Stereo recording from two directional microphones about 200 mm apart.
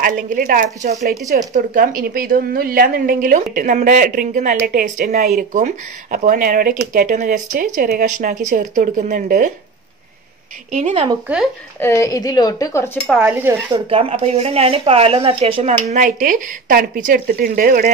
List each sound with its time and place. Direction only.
0.0 s a woman's voice: 40° right (ahead or behind)
10.7 s speech: 35° right (ahead or behind)
11.8 s speech: 15° left (ahead or behind)
13.2 s speech: 10° right (ahead or behind)
13.8 s speech: 30° right (ahead or behind); by 17.9 s 45° right (ahead or behind)